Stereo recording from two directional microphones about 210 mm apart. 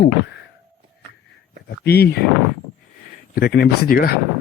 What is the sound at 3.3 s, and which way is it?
Speech, 50° left (ahead or behind).